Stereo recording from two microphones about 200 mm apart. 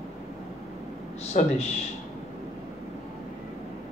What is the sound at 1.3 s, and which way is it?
Speech, 40° left (ahead or behind).